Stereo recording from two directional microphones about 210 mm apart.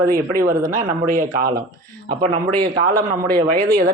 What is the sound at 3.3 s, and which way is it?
Speech, 45° right (ahead or behind).